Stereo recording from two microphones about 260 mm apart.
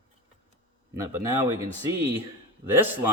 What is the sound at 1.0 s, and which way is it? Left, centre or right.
A man's voice, centre.